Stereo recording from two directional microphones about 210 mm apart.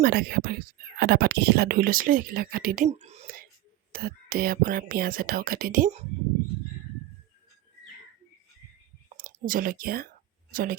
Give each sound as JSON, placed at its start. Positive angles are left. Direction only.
{"t": 0.0, "sound": "speech", "side_deg": -45}
{"t": 9.1, "sound": "speech", "side_deg": -40}